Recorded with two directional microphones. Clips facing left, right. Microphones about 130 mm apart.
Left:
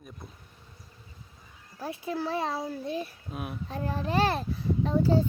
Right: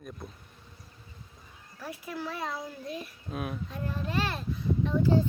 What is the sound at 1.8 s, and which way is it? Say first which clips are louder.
A child's voice: left 5 dB; 25° left (ahead or behind).